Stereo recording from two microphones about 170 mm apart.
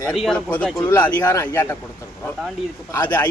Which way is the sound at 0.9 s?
20° left (ahead or behind).